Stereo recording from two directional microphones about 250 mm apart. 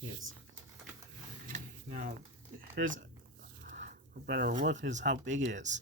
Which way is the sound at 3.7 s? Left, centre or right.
Right.